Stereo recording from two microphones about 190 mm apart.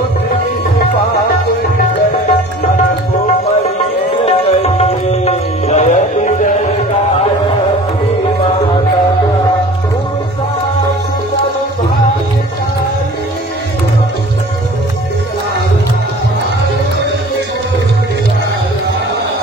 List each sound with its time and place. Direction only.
4.2 s tabla: 35° left (ahead or behind)